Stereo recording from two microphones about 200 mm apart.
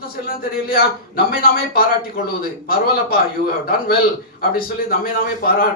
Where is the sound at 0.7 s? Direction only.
50° left (ahead or behind).